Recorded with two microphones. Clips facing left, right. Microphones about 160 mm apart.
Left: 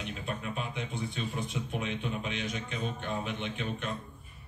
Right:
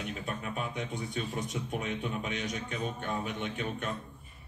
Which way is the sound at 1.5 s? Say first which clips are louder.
Even; 45° right (ahead or behind).